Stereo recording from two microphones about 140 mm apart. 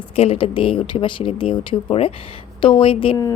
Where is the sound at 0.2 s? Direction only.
45° left (ahead or behind).